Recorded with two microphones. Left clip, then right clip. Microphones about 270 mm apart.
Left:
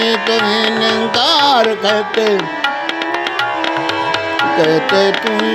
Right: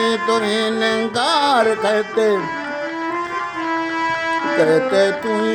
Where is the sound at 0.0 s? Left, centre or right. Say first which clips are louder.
Left 4 dB; left.